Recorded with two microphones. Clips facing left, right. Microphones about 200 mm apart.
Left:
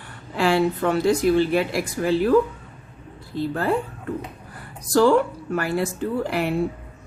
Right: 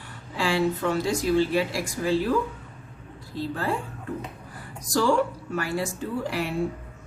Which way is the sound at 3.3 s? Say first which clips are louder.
Left 5 dB; 60° left (ahead or behind).